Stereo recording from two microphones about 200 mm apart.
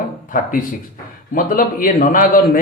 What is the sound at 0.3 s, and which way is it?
Speech, 45° left (ahead or behind).